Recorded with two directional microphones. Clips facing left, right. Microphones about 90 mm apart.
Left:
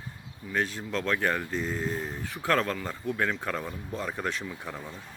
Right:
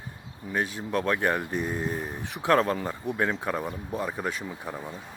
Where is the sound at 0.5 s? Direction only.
15° right (ahead or behind).